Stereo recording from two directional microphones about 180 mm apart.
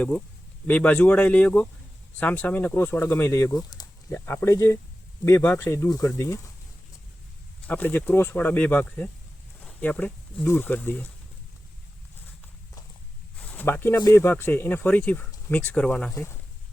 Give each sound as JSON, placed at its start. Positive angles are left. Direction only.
{"t": 0.7, "sound": "speech", "side_deg": 5}
{"t": 7.7, "sound": "speech", "side_deg": 10}
{"t": 13.3, "sound": "speech", "side_deg": 10}